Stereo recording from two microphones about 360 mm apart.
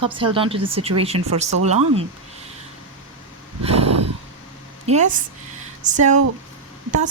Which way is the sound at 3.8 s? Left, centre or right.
Right.